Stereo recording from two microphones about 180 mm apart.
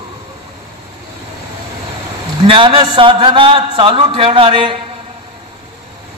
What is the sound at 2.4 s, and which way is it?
A man's voice, 30° right (ahead or behind).